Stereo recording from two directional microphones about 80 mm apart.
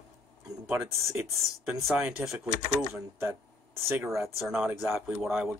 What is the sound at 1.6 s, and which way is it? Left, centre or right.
Speech, centre.